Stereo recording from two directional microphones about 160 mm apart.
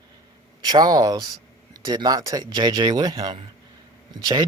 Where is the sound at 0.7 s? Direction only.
25° right (ahead or behind).